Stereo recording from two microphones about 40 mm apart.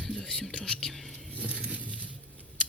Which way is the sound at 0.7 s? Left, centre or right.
Centre.